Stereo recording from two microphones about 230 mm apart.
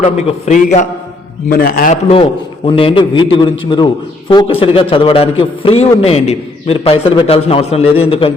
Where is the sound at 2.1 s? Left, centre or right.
Left.